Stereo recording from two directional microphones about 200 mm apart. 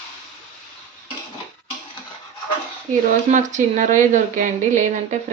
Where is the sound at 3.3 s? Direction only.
40° right (ahead or behind).